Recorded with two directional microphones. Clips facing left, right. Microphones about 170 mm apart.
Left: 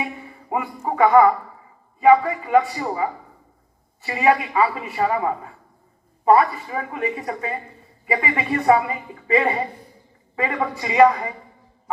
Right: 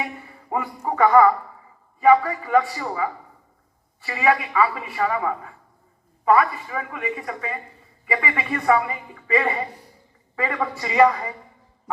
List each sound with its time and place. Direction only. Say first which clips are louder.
0.5 s speech: left 1 dB; 10° left (ahead or behind)